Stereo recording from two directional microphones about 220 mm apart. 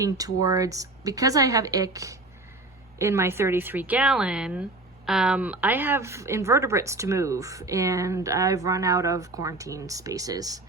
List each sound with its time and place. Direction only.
0.4 s a woman's voice: 15° right (ahead or behind)